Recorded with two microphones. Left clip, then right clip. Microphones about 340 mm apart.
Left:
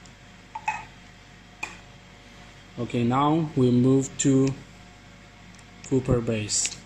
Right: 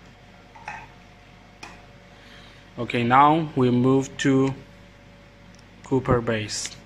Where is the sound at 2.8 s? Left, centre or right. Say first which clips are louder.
Right 7 dB; right.